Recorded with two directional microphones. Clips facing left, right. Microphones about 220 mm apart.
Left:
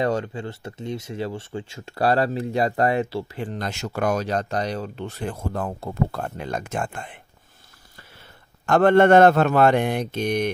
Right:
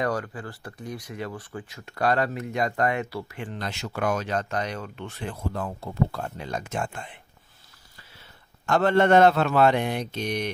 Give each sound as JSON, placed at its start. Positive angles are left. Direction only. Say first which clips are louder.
{"t": 0.0, "sound": "speech", "louder": "left 4 dB", "side_deg": 25}
{"t": 3.4, "sound": "speech", "louder": "left 4 dB", "side_deg": 45}
{"t": 8.6, "sound": "speech", "louder": "left 5 dB", "side_deg": 55}